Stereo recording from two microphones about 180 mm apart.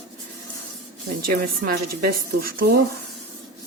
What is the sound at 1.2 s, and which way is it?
Speech, 55° right (ahead or behind).